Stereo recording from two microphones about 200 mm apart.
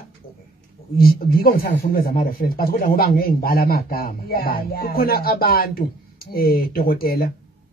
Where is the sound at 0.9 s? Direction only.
50° left (ahead or behind).